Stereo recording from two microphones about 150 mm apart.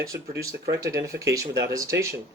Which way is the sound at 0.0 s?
20° right (ahead or behind).